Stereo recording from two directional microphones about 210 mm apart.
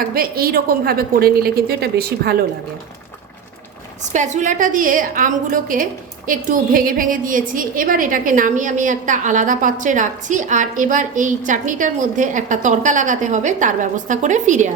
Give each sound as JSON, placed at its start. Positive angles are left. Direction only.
{"t": 0.1, "sound": "a woman's voice", "side_deg": -45}
{"t": 4.1, "sound": "a woman's voice", "side_deg": -35}